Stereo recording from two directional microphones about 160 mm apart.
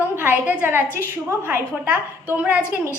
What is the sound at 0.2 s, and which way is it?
A woman's voice, 10° right (ahead or behind).